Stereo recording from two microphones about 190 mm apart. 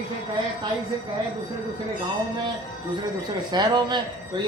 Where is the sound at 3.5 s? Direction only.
20° right (ahead or behind).